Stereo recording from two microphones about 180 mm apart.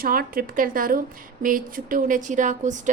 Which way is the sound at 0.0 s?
55° right (ahead or behind).